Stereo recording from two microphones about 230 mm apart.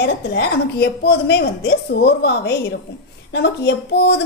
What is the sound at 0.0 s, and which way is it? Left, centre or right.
A woman's voice, left.